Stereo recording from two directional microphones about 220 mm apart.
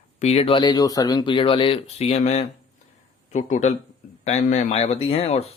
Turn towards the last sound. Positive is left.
turn(degrees=30)  # may be behind; listen again after turning